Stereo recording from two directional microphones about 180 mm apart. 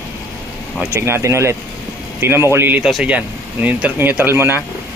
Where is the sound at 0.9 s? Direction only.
15° right (ahead or behind).